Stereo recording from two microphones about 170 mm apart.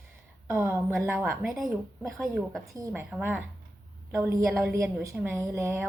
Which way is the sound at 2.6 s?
20° right (ahead or behind).